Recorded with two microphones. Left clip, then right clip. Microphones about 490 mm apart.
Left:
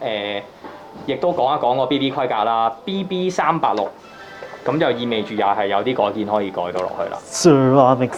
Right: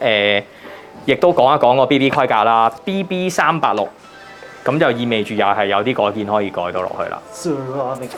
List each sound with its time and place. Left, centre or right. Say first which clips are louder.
0.0 s a sound: right 9 dB; right
1.0 s speech: right 6 dB; right
7.3 s speech: left 11 dB; left